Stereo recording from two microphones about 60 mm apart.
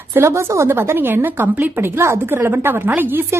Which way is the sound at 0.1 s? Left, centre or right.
Right.